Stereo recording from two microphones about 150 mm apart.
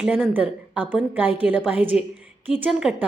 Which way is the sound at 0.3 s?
10° right (ahead or behind).